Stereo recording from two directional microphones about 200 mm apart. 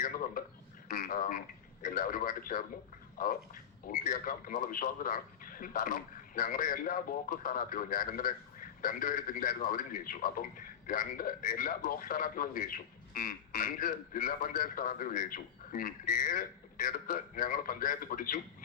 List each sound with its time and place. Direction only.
0.0 s speech: 45° left (ahead or behind)